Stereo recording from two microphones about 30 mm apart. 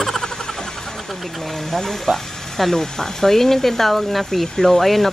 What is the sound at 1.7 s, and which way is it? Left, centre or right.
Speech, centre.